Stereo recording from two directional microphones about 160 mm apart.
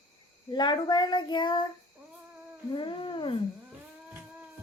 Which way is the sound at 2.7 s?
30° left (ahead or behind).